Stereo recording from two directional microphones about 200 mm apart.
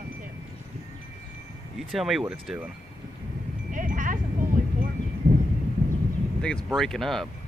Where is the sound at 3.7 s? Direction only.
40° right (ahead or behind).